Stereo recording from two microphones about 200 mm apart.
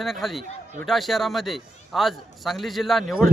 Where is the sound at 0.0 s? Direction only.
Centre (ahead or behind).